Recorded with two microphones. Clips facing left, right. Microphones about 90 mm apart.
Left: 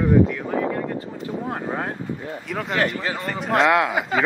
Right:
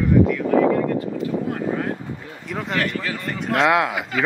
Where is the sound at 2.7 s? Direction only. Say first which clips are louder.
Left 1 dB; 30° left (ahead or behind).